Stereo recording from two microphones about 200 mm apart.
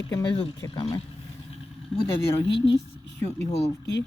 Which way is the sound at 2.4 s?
60° left (ahead or behind).